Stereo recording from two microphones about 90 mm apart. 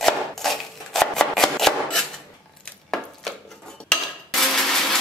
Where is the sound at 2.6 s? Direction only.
5° left (ahead or behind).